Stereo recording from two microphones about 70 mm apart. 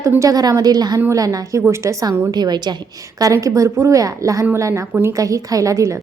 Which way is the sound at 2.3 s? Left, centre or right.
Right.